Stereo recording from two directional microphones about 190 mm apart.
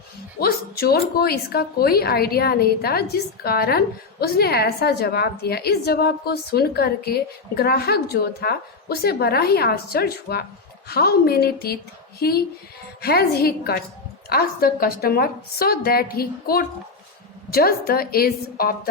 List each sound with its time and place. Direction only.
0.3 s a woman's voice: 55° left (ahead or behind)